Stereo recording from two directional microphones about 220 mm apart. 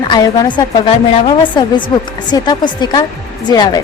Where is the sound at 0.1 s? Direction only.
20° left (ahead or behind).